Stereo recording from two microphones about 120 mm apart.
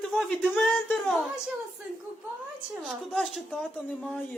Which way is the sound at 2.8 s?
Centre (ahead or behind).